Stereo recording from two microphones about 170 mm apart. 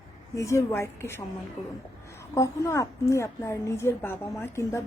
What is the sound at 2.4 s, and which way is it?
A woman's voice, 15° left (ahead or behind).